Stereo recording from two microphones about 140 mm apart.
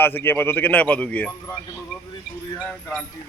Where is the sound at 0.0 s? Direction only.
15° left (ahead or behind).